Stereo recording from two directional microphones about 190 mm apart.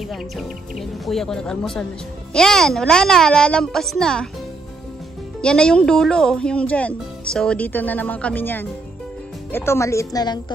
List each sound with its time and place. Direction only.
0.1 s speech: centre (ahead or behind)
5.4 s speech: 5° left (ahead or behind); by 10.4 s 20° left (ahead or behind)